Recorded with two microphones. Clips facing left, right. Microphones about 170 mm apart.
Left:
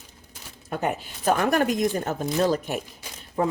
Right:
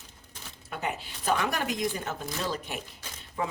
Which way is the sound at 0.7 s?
50° left (ahead or behind).